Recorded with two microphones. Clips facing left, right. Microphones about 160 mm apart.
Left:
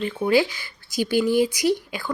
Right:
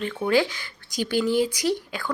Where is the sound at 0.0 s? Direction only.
10° left (ahead or behind).